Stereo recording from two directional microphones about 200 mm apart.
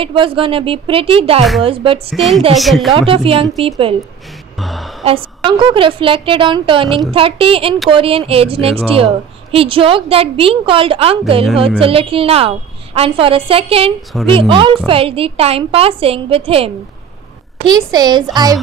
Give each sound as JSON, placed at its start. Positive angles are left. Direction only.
{"t": 0.0, "sound": "a woman's voice", "side_deg": -25}
{"t": 2.1, "sound": "a woman's voice", "side_deg": 0}
{"t": 2.9, "sound": "a woman's voice", "side_deg": -25}
{"t": 4.6, "sound": "a sound", "side_deg": 0}
{"t": 5.0, "sound": "a woman's voice", "side_deg": -25}
{"t": 14.1, "sound": "a woman's voice", "side_deg": 0}
{"t": 14.5, "sound": "a woman's voice", "side_deg": -25}